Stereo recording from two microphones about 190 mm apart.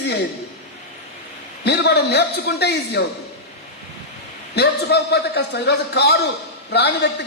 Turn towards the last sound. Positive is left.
turn(degrees=65)  # may be behind; listen again after turning